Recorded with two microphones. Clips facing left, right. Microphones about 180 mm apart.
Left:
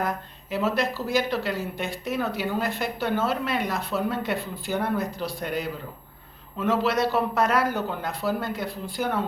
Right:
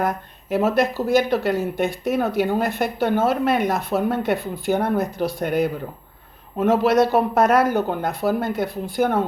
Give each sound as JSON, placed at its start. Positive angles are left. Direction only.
{"t": 0.5, "sound": "speech", "side_deg": -50}